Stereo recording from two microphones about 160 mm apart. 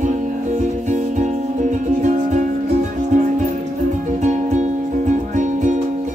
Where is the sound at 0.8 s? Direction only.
50° right (ahead or behind).